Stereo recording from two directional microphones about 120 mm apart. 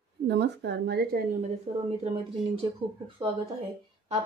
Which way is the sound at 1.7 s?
65° right (ahead or behind).